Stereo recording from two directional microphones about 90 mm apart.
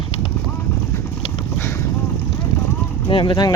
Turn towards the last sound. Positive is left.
turn(degrees=55)  # may be behind; listen again after turning